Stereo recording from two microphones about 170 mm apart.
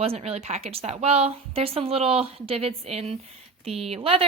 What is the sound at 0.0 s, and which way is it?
A woman's voice, 35° right (ahead or behind).